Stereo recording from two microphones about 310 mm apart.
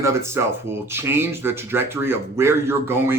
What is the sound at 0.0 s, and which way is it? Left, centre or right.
Speech, centre.